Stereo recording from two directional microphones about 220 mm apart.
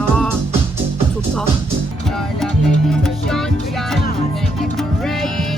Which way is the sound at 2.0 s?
Centre (ahead or behind).